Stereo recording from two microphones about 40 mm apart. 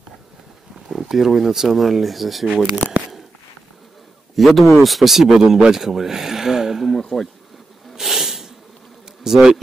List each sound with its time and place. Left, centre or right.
0.8 s speech: centre
2.4 s speech: centre
4.4 s speech: centre
7.0 s speech: centre
7.9 s snort: centre
9.2 s speech: centre